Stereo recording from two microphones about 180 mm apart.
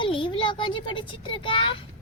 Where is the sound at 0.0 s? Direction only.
30° left (ahead or behind).